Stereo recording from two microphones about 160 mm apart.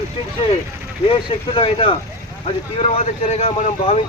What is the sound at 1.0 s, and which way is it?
Speech, 35° left (ahead or behind).